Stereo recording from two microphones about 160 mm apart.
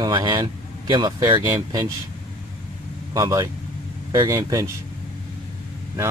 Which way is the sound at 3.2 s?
20° right (ahead or behind).